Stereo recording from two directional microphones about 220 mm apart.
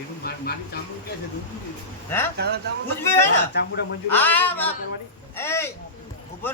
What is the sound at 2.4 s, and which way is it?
Speech, 50° right (ahead or behind).